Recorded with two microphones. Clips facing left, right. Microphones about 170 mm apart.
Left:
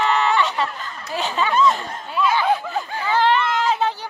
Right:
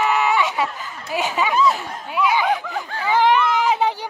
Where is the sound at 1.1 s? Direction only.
10° right (ahead or behind).